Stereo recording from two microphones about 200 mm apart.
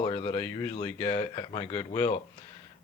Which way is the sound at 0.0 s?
25° left (ahead or behind).